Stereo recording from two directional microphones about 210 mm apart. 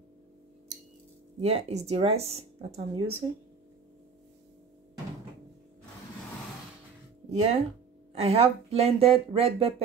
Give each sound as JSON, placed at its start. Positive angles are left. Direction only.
{"t": 1.4, "sound": "speech", "side_deg": -30}
{"t": 7.2, "sound": "speech", "side_deg": -30}